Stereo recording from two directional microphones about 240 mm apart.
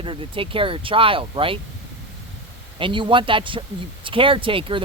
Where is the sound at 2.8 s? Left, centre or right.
Right.